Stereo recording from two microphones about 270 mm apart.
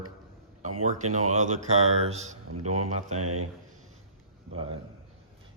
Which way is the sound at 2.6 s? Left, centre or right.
Right.